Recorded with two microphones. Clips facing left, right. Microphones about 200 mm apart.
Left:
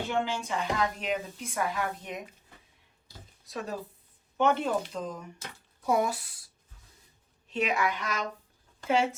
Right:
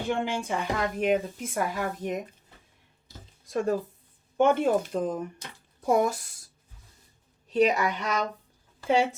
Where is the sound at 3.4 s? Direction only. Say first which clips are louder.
Right 9 dB; 50° right (ahead or behind).